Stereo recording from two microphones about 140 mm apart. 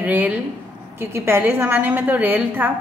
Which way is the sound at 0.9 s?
15° right (ahead or behind).